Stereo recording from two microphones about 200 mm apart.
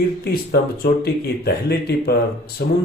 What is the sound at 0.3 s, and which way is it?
Speech, 50° left (ahead or behind).